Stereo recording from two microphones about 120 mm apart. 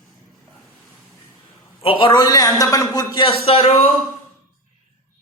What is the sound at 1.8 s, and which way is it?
A man's voice, 45° left (ahead or behind).